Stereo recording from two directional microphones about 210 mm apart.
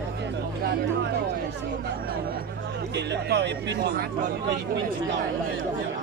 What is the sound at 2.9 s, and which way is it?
Speech, 55° right (ahead or behind).